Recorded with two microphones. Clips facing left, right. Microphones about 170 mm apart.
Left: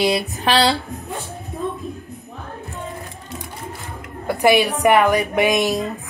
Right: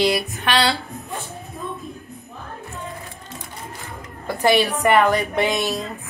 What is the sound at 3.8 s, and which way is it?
A woman's voice, 15° left (ahead or behind).